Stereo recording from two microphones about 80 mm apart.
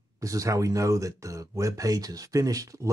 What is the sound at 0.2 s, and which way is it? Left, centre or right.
Speech, right.